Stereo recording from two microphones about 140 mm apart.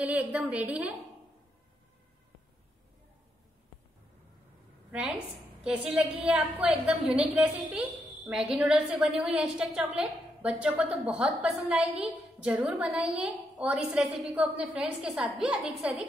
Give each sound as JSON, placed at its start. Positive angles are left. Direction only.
{"t": 0.0, "sound": "a woman's voice", "side_deg": -10}
{"t": 5.6, "sound": "a woman's voice", "side_deg": -5}